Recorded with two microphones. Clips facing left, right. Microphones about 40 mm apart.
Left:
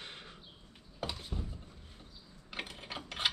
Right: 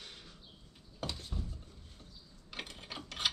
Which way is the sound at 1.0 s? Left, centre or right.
Centre.